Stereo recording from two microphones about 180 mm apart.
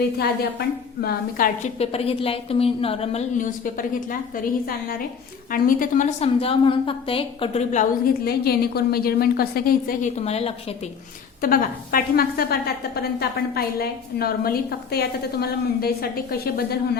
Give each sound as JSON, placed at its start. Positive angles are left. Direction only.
{"t": 1.0, "sound": "a woman's voice", "side_deg": 50}
{"t": 1.8, "sound": "a woman's voice", "side_deg": 35}
{"t": 5.5, "sound": "a woman's voice", "side_deg": 50}
{"t": 11.4, "sound": "a woman's voice", "side_deg": 50}